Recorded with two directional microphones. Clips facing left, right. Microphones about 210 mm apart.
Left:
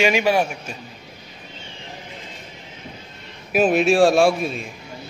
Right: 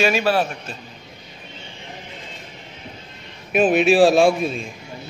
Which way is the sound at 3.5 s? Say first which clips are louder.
Right 1 dB; centre (ahead or behind).